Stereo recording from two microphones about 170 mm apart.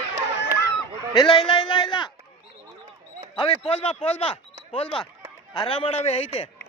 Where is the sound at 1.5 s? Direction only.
30° left (ahead or behind).